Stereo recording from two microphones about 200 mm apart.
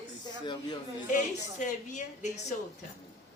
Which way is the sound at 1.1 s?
35° left (ahead or behind).